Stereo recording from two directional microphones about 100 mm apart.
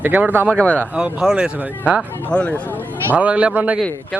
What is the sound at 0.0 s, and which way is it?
Speech, 15° right (ahead or behind).